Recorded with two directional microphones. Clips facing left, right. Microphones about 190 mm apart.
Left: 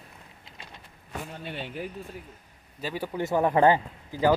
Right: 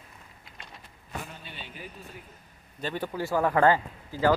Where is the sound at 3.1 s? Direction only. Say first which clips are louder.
Left 2 dB; 20° left (ahead or behind).